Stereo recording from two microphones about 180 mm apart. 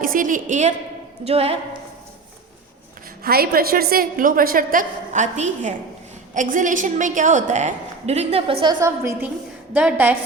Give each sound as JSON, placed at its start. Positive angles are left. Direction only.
{"t": 0.0, "sound": "a woman's voice", "side_deg": -50}
{"t": 1.2, "sound": "a woman's voice", "side_deg": -35}
{"t": 3.2, "sound": "a woman's voice", "side_deg": -60}
{"t": 8.6, "sound": "a woman's voice", "side_deg": -15}